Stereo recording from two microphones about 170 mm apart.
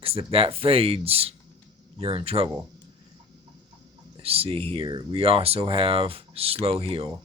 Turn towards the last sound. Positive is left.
turn(degrees=-35)  # may be behind; listen again after turning